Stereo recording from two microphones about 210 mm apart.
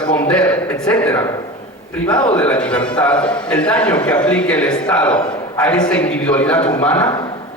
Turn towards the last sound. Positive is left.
turn(degrees=5)  # may be behind; listen again after turning